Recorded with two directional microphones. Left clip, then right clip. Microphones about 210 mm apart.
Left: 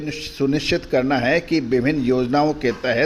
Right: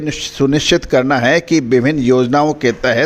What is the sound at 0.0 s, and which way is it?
A man's voice, 40° right (ahead or behind).